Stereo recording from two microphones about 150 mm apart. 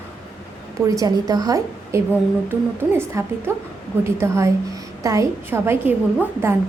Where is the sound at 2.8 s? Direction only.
15° right (ahead or behind).